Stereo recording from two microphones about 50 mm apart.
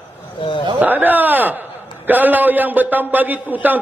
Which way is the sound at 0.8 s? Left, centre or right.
Right.